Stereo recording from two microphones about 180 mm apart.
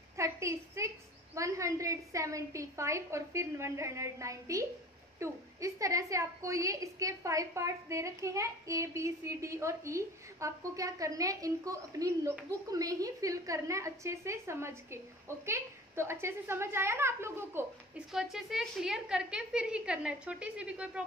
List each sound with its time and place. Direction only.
0.1 s a woman's voice: 15° right (ahead or behind)
18.1 s a woman's voice: centre (ahead or behind)